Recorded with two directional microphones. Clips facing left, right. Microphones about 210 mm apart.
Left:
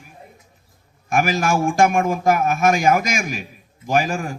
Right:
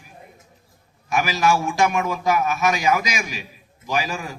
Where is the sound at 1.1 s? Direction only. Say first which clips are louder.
Left 1 dB; 50° left (ahead or behind).